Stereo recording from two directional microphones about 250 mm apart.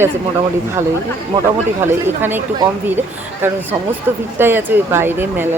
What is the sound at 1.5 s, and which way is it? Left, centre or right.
Speech, centre.